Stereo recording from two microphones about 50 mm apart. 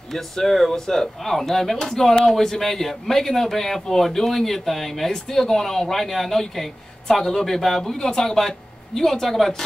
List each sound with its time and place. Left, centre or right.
0.1 s speech: centre